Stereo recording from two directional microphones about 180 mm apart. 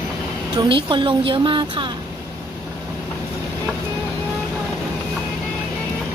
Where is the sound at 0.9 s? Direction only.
25° right (ahead or behind).